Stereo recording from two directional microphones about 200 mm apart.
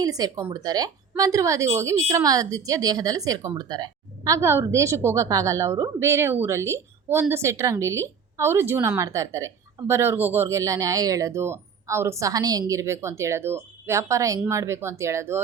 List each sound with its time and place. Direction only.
0.0 s speech: 20° right (ahead or behind)